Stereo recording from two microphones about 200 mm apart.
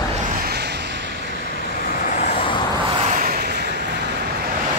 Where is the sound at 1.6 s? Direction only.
45° left (ahead or behind).